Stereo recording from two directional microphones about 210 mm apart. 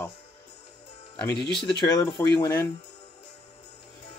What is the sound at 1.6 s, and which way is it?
Speech, 20° left (ahead or behind).